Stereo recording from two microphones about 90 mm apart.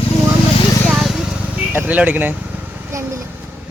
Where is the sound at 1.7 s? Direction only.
20° right (ahead or behind).